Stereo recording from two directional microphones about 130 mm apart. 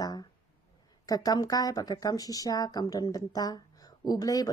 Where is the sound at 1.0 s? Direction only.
30° left (ahead or behind).